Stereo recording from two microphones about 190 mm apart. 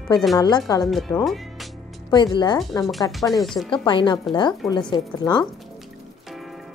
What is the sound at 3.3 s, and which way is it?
Speech, centre (ahead or behind).